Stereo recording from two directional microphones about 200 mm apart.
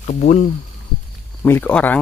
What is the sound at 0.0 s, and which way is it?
Speech, 40° left (ahead or behind).